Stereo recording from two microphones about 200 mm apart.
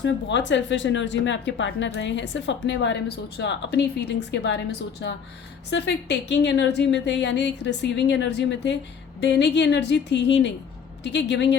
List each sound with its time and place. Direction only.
0.0 s speech: 65° left (ahead or behind)